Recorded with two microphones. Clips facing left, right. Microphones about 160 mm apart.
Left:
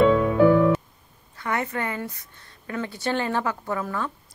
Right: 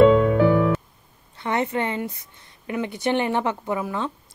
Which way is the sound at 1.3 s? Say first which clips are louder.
Right 4 dB; 25° right (ahead or behind).